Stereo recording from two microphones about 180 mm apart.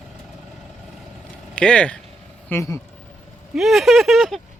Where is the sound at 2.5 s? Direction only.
15° left (ahead or behind).